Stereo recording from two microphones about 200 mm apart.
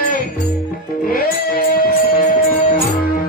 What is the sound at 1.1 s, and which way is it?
Music, 50° left (ahead or behind).